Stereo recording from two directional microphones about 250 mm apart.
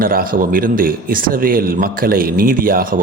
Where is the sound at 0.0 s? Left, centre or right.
Right.